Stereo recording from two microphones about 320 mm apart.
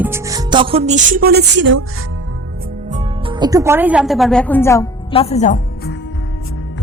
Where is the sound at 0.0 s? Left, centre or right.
Centre; by 1.8 s right.